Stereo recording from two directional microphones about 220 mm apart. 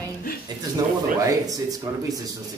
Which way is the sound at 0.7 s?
15° right (ahead or behind).